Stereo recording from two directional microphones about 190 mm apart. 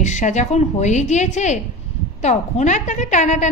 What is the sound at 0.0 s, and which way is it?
A woman's voice, 40° left (ahead or behind).